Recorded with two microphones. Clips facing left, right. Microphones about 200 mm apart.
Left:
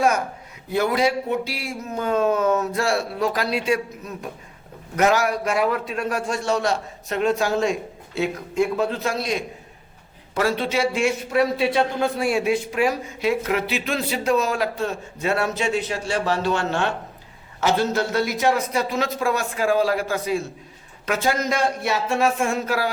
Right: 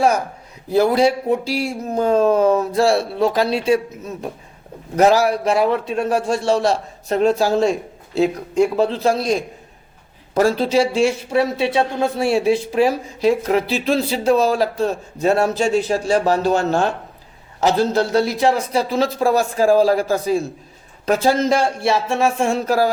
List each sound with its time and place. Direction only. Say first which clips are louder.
0.7 s speech: right 6 dB; 35° right (ahead or behind)
22.6 s speech: right 7 dB; 40° right (ahead or behind)